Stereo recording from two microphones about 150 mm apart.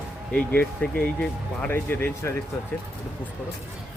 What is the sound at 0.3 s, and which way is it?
Speech, 10° left (ahead or behind).